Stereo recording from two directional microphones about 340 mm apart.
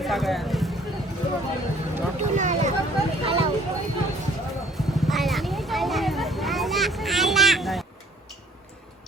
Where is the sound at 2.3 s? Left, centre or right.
Right.